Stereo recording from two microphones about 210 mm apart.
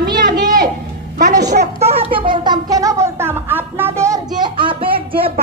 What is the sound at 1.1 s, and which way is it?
Speech, 35° right (ahead or behind).